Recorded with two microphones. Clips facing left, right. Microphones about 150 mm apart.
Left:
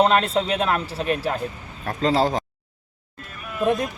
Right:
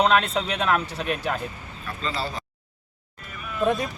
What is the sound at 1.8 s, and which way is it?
Speech, 80° left.